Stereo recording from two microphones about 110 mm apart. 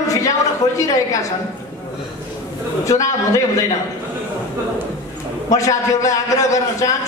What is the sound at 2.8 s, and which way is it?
Speech, 30° left (ahead or behind).